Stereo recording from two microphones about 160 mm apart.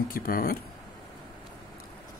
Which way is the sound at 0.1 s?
65° left (ahead or behind).